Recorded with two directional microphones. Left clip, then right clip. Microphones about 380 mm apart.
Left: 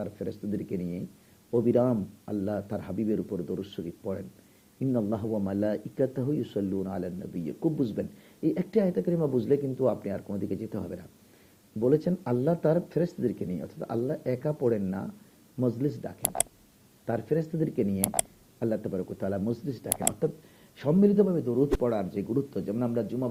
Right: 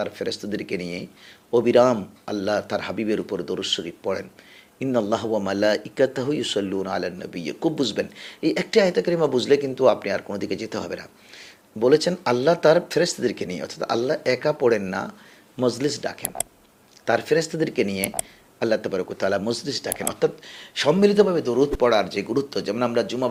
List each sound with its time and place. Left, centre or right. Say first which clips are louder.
0.0 s speech: right 9 dB; centre
0.8 s speech: right 6 dB; right
1.6 s speech: right 9 dB; centre
15.9 s speech: right 7 dB; centre